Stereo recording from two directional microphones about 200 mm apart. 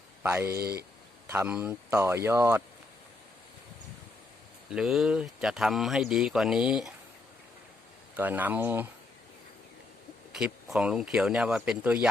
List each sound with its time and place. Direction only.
0.2 s speech: 10° right (ahead or behind)
0.5 s speech: 50° right (ahead or behind)
1.3 s speech: 10° right (ahead or behind)
4.7 s speech: centre (ahead or behind)
8.1 s speech: 10° right (ahead or behind)
10.3 s speech: 5° right (ahead or behind)